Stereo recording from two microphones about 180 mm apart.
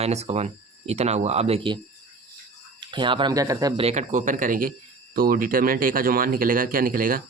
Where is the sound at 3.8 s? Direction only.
40° right (ahead or behind).